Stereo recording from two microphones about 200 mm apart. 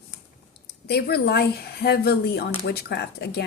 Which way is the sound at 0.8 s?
55° left (ahead or behind).